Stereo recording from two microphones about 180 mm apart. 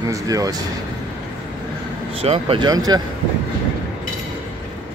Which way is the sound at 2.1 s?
35° right (ahead or behind).